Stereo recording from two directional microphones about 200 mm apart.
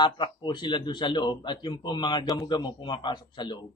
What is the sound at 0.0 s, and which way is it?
Speech, 25° left (ahead or behind).